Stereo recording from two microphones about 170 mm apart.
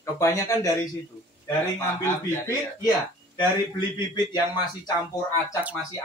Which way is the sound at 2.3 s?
20° left (ahead or behind).